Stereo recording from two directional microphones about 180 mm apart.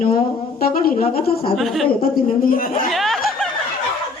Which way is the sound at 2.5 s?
50° left (ahead or behind).